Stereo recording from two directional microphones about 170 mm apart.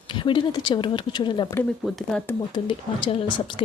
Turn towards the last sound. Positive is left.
turn(degrees=30)  # may be behind; listen again after turning